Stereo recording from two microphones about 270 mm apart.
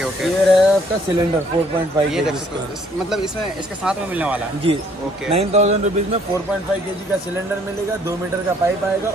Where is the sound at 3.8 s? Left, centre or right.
Centre.